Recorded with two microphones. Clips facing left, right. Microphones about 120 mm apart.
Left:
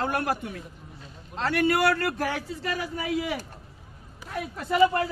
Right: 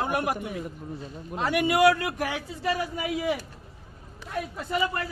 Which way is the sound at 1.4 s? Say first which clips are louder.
Right 2 dB; 15° right (ahead or behind).